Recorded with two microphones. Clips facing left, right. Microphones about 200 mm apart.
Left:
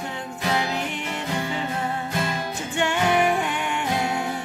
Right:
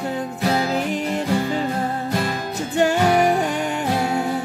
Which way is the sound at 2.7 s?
40° right (ahead or behind).